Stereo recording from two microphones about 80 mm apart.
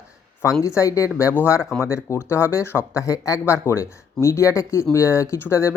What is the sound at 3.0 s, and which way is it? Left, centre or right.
Speech, left.